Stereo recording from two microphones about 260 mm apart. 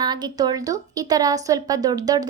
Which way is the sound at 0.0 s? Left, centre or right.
Centre.